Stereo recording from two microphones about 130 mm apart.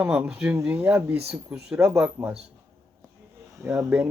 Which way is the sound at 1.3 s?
5° right (ahead or behind).